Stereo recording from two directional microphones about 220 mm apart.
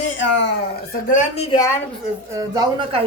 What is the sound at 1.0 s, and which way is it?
Speech, 35° left (ahead or behind).